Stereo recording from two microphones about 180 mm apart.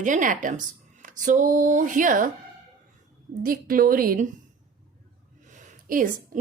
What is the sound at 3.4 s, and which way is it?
Speech, 50° right (ahead or behind).